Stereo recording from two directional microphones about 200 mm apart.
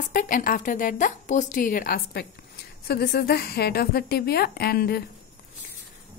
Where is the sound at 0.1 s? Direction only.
40° left (ahead or behind).